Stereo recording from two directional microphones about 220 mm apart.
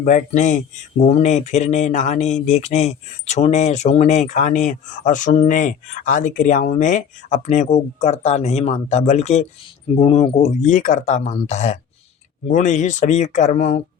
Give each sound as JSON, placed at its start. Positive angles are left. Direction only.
{"t": 0.0, "sound": "speech", "side_deg": 35}